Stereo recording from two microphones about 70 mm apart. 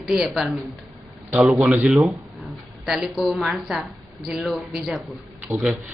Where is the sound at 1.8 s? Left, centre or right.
Centre.